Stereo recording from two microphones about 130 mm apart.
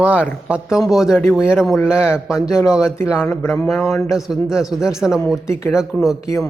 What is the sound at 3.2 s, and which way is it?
Speech, 15° left (ahead or behind).